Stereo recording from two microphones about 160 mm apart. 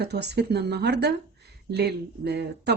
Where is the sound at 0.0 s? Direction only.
90° right.